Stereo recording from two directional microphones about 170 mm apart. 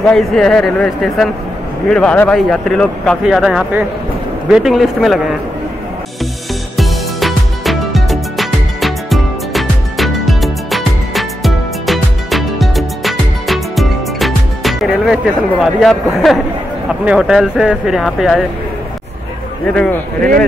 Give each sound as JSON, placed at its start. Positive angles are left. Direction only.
{"t": 0.0, "sound": "a man's voice", "side_deg": 5}
{"t": 6.8, "sound": "music", "side_deg": 0}
{"t": 15.6, "sound": "a man's voice", "side_deg": 0}
{"t": 19.7, "sound": "a man's voice", "side_deg": 5}